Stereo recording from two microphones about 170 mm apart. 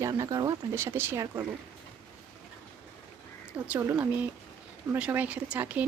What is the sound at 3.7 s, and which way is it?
Speech, 10° right (ahead or behind).